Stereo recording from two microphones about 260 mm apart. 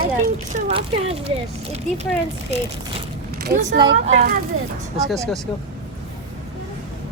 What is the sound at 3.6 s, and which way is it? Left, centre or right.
Speech, centre.